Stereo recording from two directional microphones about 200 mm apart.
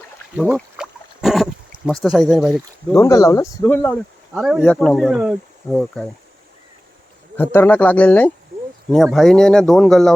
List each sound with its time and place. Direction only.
0.5 s a sound: centre (ahead or behind)
1.9 s speech: centre (ahead or behind)
2.9 s speech: 15° left (ahead or behind)
4.4 s speech: centre (ahead or behind)
7.3 s speech: 10° left (ahead or behind)